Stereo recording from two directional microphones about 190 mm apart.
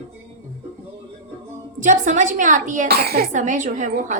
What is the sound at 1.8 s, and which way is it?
A woman's voice, 45° right (ahead or behind).